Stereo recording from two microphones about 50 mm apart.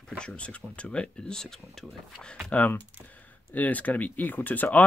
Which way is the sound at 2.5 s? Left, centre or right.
Left.